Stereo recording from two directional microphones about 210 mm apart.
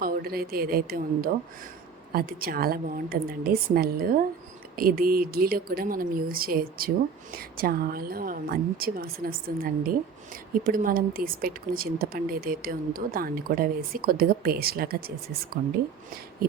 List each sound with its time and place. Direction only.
0.0 s speech: 45° right (ahead or behind)